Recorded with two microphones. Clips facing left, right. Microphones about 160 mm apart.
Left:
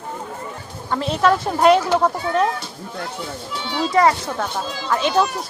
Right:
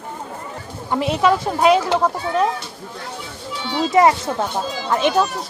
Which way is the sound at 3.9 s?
20° right (ahead or behind).